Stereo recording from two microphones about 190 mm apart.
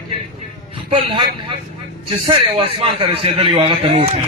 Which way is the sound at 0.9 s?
30° right (ahead or behind).